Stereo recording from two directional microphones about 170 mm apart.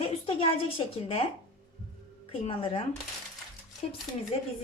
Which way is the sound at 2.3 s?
30° left (ahead or behind).